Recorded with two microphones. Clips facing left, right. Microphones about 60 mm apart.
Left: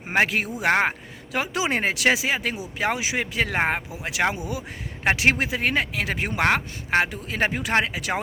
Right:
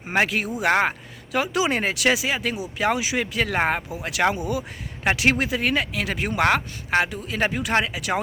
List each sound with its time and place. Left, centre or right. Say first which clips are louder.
0.1 s speech: even; left